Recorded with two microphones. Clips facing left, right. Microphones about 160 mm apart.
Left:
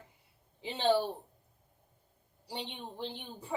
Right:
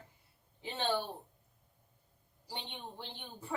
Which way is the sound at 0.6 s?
15° left (ahead or behind).